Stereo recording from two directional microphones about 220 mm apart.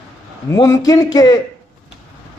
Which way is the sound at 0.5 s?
15° left (ahead or behind).